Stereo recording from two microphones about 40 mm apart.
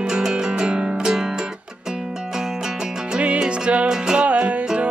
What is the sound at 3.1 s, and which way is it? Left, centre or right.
Music, right.